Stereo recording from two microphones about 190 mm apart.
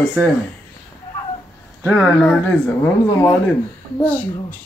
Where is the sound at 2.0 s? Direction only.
Centre (ahead or behind).